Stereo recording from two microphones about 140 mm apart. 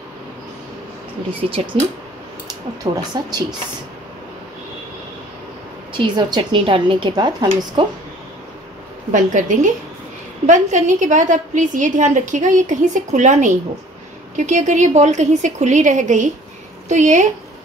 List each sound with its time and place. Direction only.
1.6 s speech: 45° right (ahead or behind)
2.4 s speech: 30° right (ahead or behind)
5.9 s a woman's voice: 35° right (ahead or behind)
9.1 s a woman's voice: 65° right (ahead or behind)